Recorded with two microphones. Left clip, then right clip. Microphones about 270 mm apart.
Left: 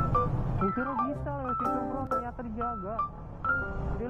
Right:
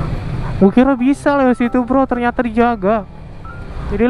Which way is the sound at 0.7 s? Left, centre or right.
Right.